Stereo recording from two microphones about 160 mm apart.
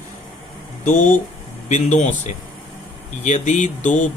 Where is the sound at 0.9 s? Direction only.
50° left (ahead or behind).